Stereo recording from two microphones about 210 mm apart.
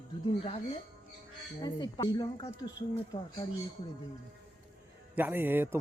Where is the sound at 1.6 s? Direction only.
20° left (ahead or behind).